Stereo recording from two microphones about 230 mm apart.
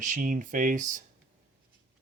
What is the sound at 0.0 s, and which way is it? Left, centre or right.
Speech, right.